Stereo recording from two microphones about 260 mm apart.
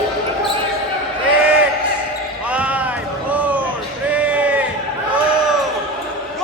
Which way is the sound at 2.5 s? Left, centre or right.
Centre.